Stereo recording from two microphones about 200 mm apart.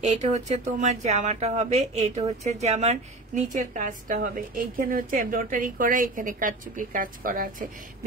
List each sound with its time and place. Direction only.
0.0 s speech: 35° right (ahead or behind)